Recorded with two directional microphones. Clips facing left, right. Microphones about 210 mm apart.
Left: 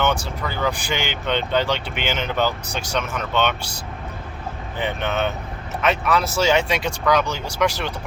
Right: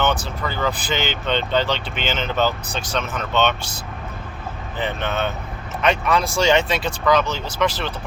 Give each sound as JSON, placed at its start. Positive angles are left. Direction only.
{"t": 0.0, "sound": "speech", "side_deg": 10}
{"t": 4.8, "sound": "speech", "side_deg": 15}
{"t": 5.8, "sound": "speech", "side_deg": 5}